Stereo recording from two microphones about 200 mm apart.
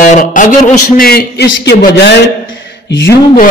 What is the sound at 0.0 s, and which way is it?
Speech, 40° left (ahead or behind).